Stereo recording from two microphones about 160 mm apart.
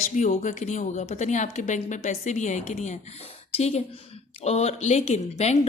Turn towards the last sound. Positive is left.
turn(degrees=45)  # may be behind; listen again after turning